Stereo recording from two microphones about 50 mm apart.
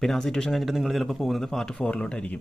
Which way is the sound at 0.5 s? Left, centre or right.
Centre.